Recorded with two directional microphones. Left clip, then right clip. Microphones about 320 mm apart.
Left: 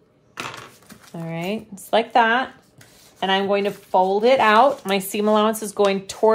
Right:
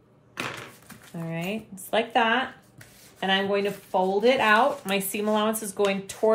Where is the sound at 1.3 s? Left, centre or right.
Left.